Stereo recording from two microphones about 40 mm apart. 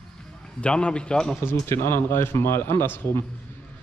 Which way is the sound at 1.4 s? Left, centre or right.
Left.